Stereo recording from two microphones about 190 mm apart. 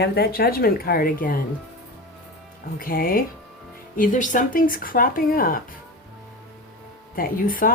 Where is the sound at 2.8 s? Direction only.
50° left (ahead or behind).